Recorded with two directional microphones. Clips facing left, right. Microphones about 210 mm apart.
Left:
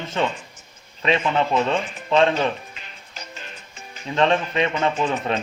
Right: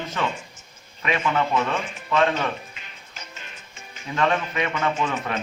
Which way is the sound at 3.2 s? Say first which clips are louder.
Left 4 dB; 35° left (ahead or behind).